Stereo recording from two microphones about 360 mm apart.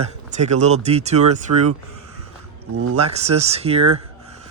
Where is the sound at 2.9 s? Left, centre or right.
Centre.